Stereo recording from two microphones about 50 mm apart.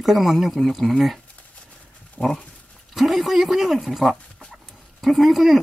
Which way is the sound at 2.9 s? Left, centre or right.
Centre.